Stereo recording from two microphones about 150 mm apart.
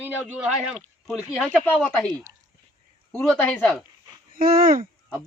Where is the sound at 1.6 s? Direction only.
10° left (ahead or behind).